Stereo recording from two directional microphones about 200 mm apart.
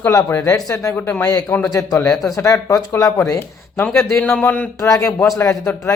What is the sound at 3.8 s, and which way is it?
Speech, 5° left (ahead or behind).